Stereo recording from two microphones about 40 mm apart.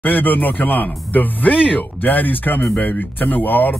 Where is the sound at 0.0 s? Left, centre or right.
Left.